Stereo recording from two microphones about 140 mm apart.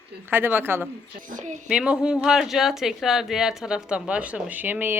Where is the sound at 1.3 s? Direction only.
65° right (ahead or behind).